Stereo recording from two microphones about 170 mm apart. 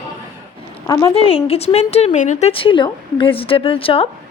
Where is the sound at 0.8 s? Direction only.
20° left (ahead or behind).